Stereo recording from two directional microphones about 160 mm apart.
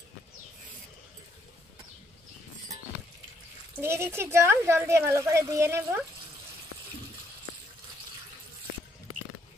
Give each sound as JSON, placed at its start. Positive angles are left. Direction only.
{"t": 3.8, "sound": "speech", "side_deg": -15}